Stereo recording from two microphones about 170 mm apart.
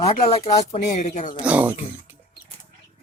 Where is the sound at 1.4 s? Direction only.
10° right (ahead or behind).